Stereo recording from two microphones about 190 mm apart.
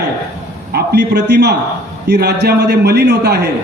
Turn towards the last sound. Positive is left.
turn(degrees=-60)  # may be behind; listen again after turning